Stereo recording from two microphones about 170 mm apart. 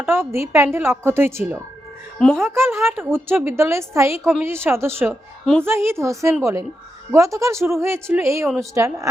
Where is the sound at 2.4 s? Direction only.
15° right (ahead or behind).